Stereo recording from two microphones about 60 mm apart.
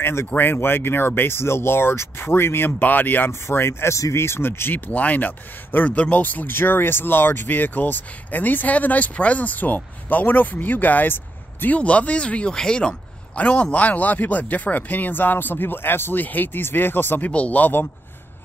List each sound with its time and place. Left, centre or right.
0.0 s speech: left
0.4 s speech: left
3.3 s a man's voice: left
17.3 s a man's voice: left